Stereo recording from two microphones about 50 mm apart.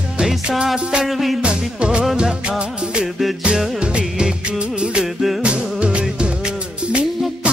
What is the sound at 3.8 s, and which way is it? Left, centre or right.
Music, right.